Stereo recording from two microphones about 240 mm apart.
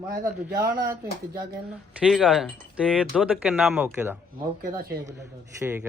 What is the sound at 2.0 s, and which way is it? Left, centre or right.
Speech, centre.